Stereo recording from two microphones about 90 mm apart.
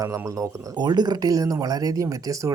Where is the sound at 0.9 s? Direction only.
50° right (ahead or behind).